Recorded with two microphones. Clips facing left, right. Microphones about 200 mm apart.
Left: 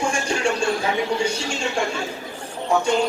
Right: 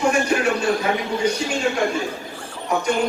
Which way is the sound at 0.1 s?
25° left (ahead or behind).